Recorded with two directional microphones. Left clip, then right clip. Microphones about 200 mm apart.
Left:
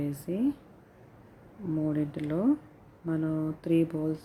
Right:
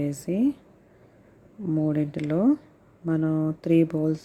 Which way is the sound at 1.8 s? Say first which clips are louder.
Right 5 dB; 30° right (ahead or behind).